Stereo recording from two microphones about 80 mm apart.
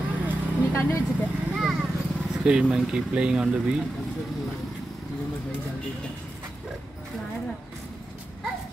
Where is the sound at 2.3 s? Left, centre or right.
Centre.